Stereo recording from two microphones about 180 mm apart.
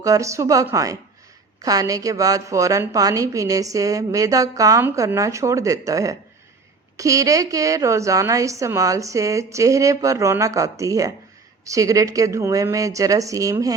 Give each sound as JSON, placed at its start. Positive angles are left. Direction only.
{"t": 0.0, "sound": "a woman's voice", "side_deg": -15}